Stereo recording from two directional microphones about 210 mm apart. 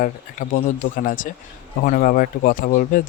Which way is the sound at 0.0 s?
40° left (ahead or behind).